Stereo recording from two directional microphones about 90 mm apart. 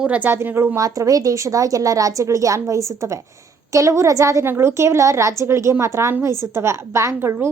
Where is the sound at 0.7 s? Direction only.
40° right (ahead or behind).